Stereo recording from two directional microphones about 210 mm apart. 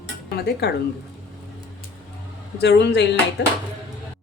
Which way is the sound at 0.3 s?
50° left (ahead or behind).